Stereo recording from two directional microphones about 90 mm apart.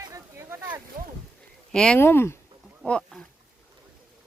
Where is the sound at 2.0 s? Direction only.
25° left (ahead or behind).